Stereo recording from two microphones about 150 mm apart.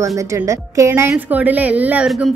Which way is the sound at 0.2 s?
20° right (ahead or behind).